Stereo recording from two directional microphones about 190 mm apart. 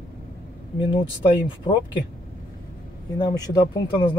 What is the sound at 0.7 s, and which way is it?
Speech, 25° left (ahead or behind).